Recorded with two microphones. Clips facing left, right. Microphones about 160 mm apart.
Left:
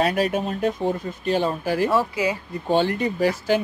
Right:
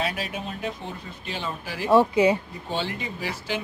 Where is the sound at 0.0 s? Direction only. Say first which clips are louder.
Left 8 dB; 45° left (ahead or behind).